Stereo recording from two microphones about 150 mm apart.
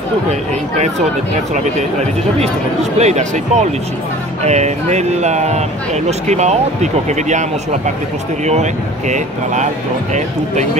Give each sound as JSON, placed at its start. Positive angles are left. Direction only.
{"t": 3.0, "sound": "speech", "side_deg": -50}
{"t": 9.1, "sound": "speech", "side_deg": -50}